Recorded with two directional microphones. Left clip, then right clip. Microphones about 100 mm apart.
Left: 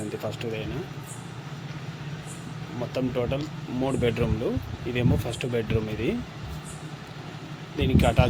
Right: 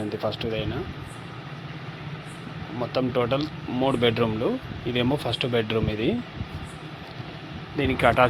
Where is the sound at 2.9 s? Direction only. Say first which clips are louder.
Right 4 dB; 35° right (ahead or behind).